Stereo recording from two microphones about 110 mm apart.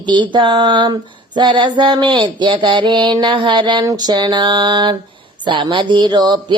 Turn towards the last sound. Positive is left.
turn(degrees=-45)  # may be behind; listen again after turning